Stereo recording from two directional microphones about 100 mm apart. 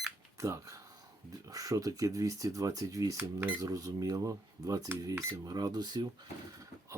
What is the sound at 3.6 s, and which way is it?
Speech, 35° right (ahead or behind).